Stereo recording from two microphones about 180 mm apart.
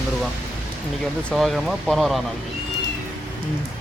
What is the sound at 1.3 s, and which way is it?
Speech, centre (ahead or behind).